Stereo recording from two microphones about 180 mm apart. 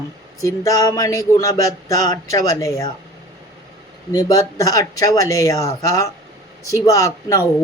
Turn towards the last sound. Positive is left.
turn(degrees=15)  # may be behind; listen again after turning